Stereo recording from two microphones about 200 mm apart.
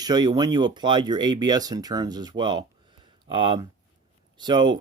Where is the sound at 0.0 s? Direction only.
20° right (ahead or behind).